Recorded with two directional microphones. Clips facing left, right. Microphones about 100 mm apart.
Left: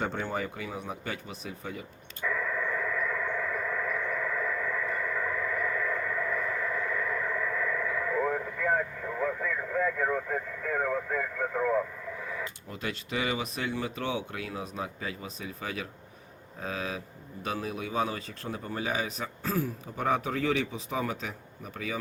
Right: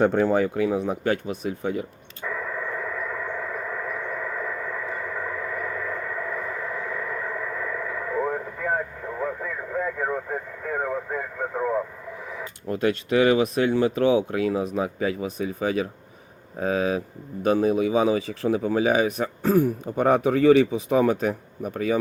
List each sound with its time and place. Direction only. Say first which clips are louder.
0.0 s speech: right 12 dB; 70° right (ahead or behind)
2.2 s radio: right 1 dB; 25° right (ahead or behind)
12.6 s speech: right 13 dB; 60° right (ahead or behind)